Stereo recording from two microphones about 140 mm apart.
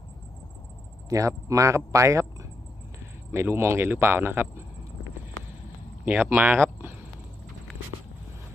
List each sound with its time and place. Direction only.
1.0 s speech: 25° right (ahead or behind)
3.3 s speech: 20° right (ahead or behind)
6.0 s speech: 10° right (ahead or behind)